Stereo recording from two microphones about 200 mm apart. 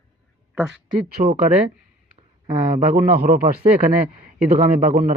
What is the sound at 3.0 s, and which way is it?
Speech, 45° right (ahead or behind).